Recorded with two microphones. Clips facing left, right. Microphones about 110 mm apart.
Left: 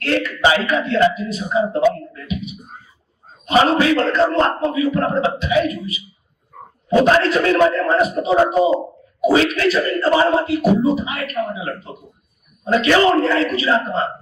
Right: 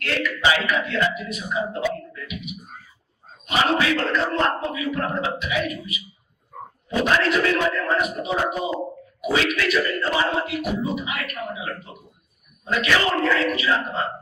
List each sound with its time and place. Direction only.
0.0 s speech: 30° left (ahead or behind)